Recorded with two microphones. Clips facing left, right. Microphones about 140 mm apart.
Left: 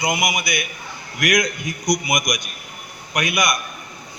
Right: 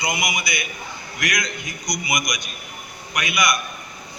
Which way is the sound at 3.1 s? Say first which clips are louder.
Left 2 dB; 50° left (ahead or behind).